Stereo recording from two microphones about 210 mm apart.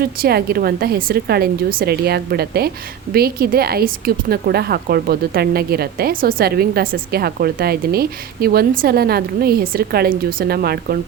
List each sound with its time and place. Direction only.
0.0 s speech: 45° right (ahead or behind)